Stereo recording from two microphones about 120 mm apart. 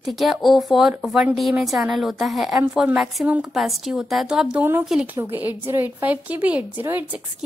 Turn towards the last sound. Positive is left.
turn(degrees=-15)  # may be behind; listen again after turning